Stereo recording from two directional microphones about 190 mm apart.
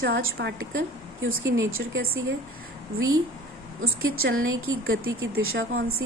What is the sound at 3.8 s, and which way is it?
A woman's voice, 90° right.